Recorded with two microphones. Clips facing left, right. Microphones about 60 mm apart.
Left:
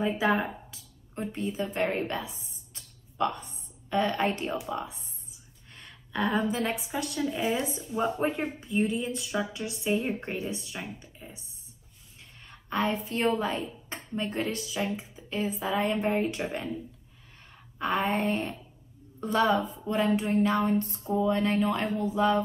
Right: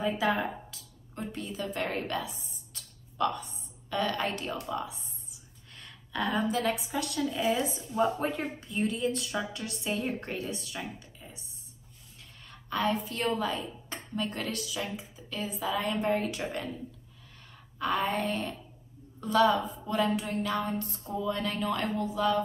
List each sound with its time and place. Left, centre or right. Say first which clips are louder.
0.0 s speech: left 2 dB; left
4.5 s a woman's voice: left 2 dB; centre
12.4 s a woman's voice: left 1 dB; left
17.7 s a woman's voice: left 2 dB; left